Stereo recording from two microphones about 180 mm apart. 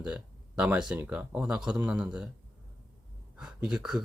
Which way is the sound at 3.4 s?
5° right (ahead or behind).